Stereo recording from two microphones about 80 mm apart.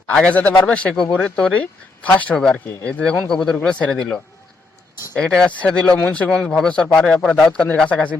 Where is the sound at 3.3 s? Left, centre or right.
Centre.